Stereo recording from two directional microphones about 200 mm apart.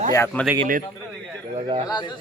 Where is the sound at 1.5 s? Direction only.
25° right (ahead or behind).